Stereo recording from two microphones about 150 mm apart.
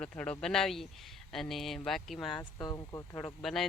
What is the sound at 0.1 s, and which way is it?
Speech, 10° left (ahead or behind).